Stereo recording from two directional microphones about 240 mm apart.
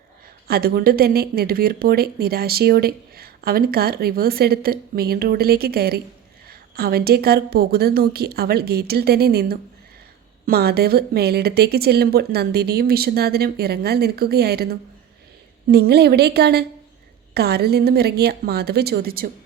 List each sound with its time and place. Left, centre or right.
0.4 s speech: right